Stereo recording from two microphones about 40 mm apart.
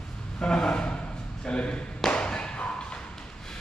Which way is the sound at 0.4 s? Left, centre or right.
Centre.